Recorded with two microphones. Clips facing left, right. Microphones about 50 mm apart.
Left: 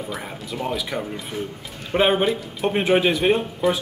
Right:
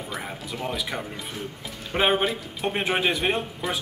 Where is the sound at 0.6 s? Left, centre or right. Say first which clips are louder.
Left 4 dB; centre.